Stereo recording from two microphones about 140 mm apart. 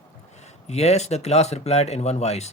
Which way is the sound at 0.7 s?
50° left (ahead or behind).